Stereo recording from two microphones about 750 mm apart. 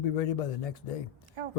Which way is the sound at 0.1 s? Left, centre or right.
Left.